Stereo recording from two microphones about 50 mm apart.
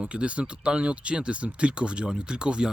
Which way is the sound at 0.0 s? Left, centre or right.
Right.